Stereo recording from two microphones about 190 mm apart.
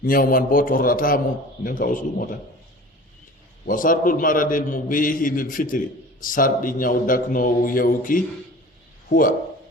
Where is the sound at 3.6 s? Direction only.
45° left (ahead or behind).